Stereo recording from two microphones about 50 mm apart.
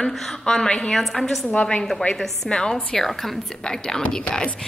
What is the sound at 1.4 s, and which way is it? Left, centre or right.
Speech, left.